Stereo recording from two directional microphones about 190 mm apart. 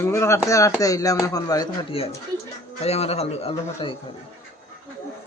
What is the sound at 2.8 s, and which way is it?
A man's voice, 35° left (ahead or behind).